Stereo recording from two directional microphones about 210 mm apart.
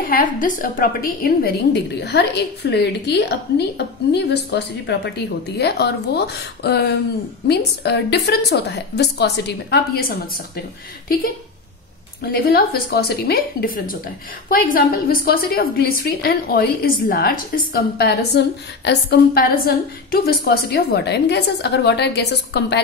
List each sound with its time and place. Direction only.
0.1 s a woman's voice: 40° left (ahead or behind)
12.2 s a woman's voice: 50° left (ahead or behind)